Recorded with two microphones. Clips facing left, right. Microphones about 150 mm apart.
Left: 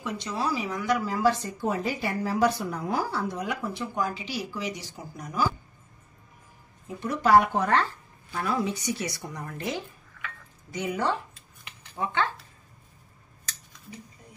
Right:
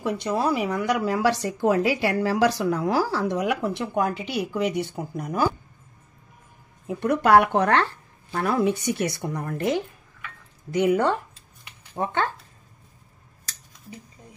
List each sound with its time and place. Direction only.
0.0 s speech: 55° right (ahead or behind)
6.9 s a woman's voice: 60° right (ahead or behind); by 12.3 s 45° right (ahead or behind)